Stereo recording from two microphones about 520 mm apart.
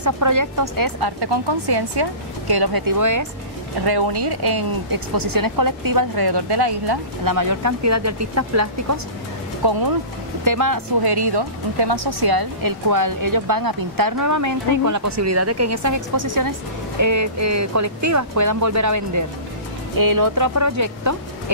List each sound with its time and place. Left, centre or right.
0.0 s speech: right
3.8 s speech: right
9.6 s speech: right